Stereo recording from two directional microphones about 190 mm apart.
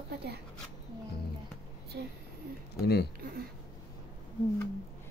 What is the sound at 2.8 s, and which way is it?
Speech, 60° left (ahead or behind).